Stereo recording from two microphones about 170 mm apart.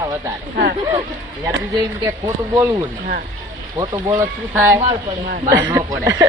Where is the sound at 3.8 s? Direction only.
20° right (ahead or behind).